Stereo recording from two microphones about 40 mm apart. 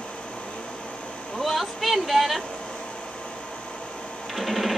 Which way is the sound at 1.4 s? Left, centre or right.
Centre.